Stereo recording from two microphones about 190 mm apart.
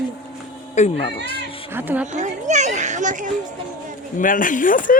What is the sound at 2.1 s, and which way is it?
A child's voice, 40° right (ahead or behind).